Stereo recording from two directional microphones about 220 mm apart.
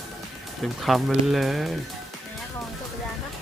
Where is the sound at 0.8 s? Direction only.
Centre (ahead or behind).